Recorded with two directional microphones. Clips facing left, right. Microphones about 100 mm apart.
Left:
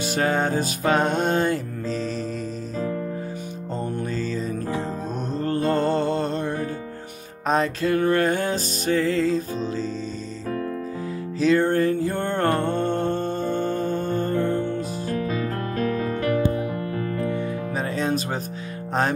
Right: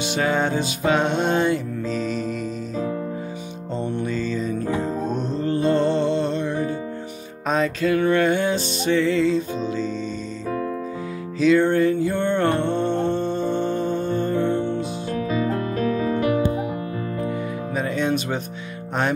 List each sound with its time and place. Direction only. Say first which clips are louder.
0.0 s music: right 1 dB; 40° left (ahead or behind)
3.8 s music: right 3 dB; 40° left (ahead or behind)
11.3 s music: right 2 dB; 40° left (ahead or behind)
14.5 s music: right 2 dB; 20° right (ahead or behind)
16.1 s music: right 2 dB; 20° right (ahead or behind)
17.7 s music: right 3 dB; 35° left (ahead or behind)